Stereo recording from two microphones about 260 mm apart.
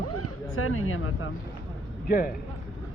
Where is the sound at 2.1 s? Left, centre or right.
Left.